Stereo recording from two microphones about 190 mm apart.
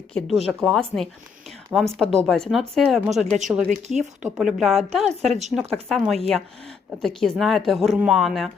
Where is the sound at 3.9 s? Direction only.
40° right (ahead or behind).